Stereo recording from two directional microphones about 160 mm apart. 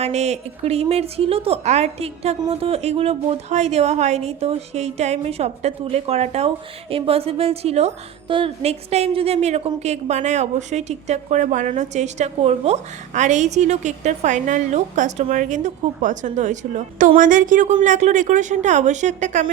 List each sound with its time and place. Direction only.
0.0 s a woman's voice: 45° right (ahead or behind)